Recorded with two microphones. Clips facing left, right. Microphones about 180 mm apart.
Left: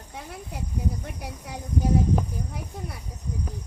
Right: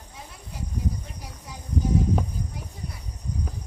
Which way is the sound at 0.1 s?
60° left (ahead or behind).